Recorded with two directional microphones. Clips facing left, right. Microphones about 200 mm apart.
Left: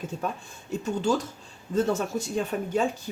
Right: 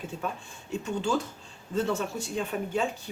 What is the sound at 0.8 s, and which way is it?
Speech, 40° left (ahead or behind).